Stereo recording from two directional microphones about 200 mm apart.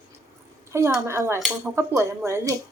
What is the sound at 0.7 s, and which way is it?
Speech, 15° right (ahead or behind).